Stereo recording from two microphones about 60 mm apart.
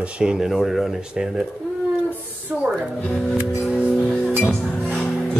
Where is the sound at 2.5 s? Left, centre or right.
Centre.